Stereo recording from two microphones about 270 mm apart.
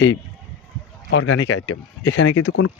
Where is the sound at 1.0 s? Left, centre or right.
Left.